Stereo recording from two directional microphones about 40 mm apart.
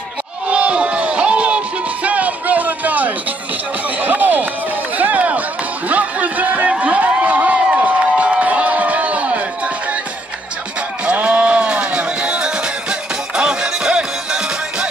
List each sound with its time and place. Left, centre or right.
0.5 s crowd: right
2.0 s music: right
4.0 s run: right
4.9 s chop: right
5.9 s a sound: right
6.7 s crowd: right
11.1 s music: right